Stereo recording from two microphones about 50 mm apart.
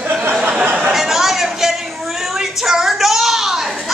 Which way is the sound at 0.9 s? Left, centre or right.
Centre.